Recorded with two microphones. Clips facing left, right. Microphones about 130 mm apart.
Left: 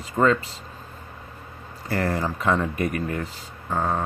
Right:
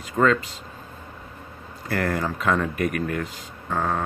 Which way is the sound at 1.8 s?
10° left (ahead or behind).